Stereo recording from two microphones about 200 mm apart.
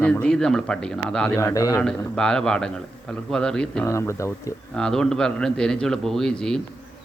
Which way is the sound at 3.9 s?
15° left (ahead or behind).